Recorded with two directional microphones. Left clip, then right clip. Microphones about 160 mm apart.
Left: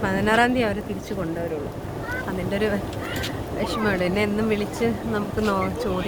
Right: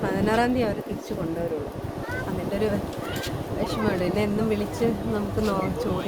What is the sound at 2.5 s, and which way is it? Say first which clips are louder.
Speech: left 2 dB; 5° right (ahead or behind).